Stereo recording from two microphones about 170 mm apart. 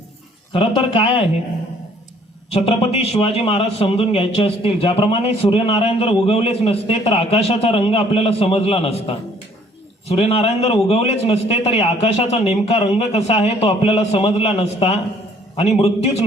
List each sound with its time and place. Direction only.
0.5 s a man's voice: 30° left (ahead or behind)
2.5 s a man's voice: 35° left (ahead or behind)